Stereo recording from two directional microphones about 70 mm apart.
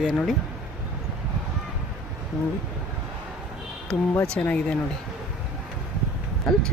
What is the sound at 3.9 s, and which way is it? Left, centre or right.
Speech, centre.